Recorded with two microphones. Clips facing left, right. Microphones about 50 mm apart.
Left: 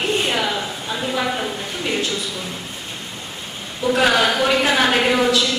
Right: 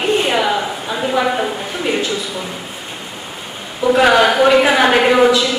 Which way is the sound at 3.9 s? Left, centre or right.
Centre.